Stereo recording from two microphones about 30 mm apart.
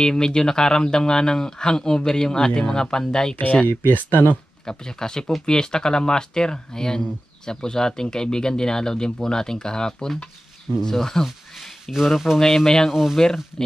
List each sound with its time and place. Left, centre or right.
0.0 s speech: left
3.9 s speech: left
4.6 s speech: left
11.9 s speech: centre
12.4 s speech: left